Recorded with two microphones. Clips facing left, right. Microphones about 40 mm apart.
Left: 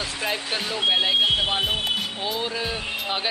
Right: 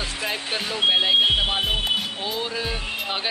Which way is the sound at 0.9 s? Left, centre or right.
Centre.